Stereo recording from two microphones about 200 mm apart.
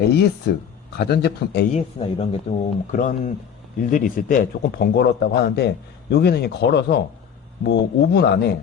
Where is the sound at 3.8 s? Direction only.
40° left (ahead or behind).